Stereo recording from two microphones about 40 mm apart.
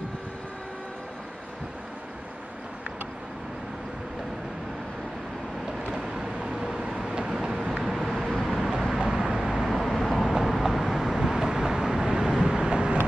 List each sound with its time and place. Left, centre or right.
5.9 s vehicle: centre